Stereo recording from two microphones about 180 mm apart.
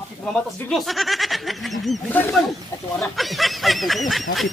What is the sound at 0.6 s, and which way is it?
Speech, centre (ahead or behind).